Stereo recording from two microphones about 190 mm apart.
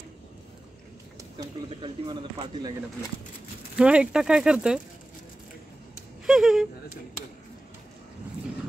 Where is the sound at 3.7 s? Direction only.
5° right (ahead or behind).